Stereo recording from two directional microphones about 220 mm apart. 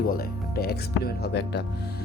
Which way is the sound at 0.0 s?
45° left (ahead or behind).